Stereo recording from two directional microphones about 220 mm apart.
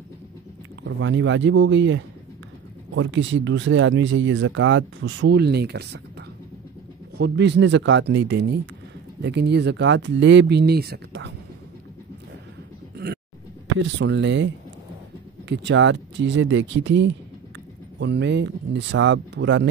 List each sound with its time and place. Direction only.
0.8 s speech: 60° right (ahead or behind)
7.2 s speech: 50° right (ahead or behind)
12.9 s a sound: 45° right (ahead or behind)
13.7 s speech: 55° right (ahead or behind)